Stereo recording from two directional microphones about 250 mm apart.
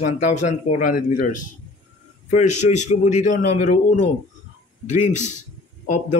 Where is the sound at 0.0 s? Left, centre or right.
Left.